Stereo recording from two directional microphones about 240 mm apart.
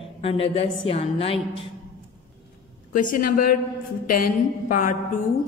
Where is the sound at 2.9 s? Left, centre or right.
Left.